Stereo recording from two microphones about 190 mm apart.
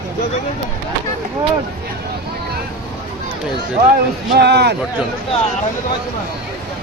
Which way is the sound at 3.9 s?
60° right (ahead or behind).